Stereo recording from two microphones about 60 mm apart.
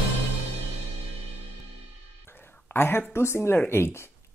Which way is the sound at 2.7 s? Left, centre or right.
Left.